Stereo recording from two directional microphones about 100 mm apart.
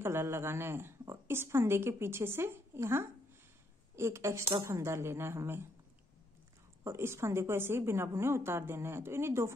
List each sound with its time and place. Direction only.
0.0 s a woman's voice: 25° right (ahead or behind)
6.8 s a woman's voice: 25° right (ahead or behind)